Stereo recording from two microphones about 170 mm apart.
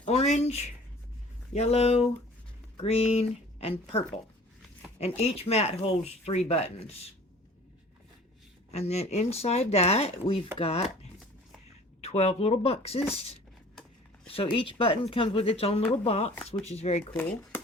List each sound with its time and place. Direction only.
0.0 s speech: 40° left (ahead or behind)
8.7 s speech: 40° left (ahead or behind)
12.0 s speech: 40° left (ahead or behind)
17.1 s speech: 10° left (ahead or behind)